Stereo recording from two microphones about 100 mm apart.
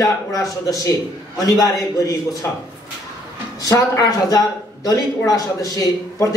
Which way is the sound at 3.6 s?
35° left (ahead or behind).